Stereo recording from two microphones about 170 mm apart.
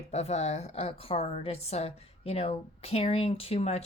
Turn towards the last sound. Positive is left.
turn(degrees=40)  # may be behind; listen again after turning